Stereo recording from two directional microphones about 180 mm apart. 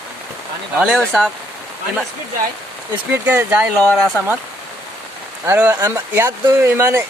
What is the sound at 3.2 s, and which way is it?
Speech, 10° right (ahead or behind).